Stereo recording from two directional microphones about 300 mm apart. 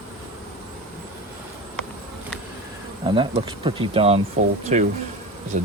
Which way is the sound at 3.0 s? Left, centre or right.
Centre.